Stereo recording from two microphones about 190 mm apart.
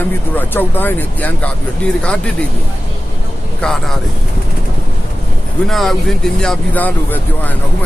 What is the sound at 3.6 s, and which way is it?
Speech, centre (ahead or behind).